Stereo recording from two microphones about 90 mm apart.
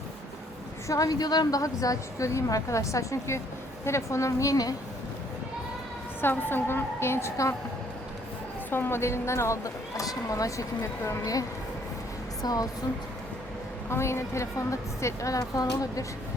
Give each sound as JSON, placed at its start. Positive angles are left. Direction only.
{"t": 0.9, "sound": "a woman's voice", "side_deg": 40}
{"t": 6.2, "sound": "a woman's voice", "side_deg": 25}
{"t": 8.7, "sound": "a woman's voice", "side_deg": 25}
{"t": 13.9, "sound": "a woman's voice", "side_deg": 30}